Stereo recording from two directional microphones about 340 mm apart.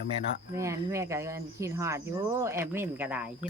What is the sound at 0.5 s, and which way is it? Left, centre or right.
Speech, centre.